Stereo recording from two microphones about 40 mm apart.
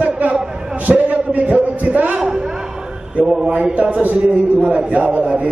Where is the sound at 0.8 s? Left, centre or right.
Right.